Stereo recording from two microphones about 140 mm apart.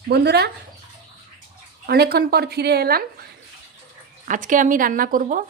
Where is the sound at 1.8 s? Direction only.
90° right.